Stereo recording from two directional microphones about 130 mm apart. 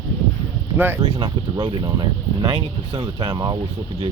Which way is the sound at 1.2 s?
35° right (ahead or behind).